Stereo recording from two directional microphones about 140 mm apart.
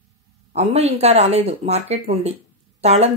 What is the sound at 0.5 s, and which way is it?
Speech, 50° right (ahead or behind).